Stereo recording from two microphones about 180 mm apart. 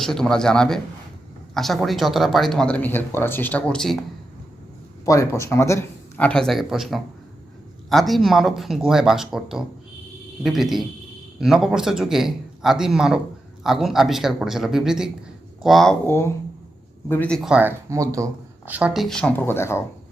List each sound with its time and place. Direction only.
0.0 s speech: 5° left (ahead or behind)
5.0 s speech: 15° left (ahead or behind); by 16.0 s centre (ahead or behind)
16.0 s speech: 15° left (ahead or behind)